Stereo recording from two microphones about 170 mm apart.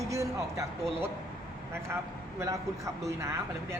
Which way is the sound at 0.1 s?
15° right (ahead or behind).